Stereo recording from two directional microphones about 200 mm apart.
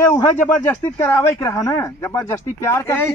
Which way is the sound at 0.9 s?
10° left (ahead or behind).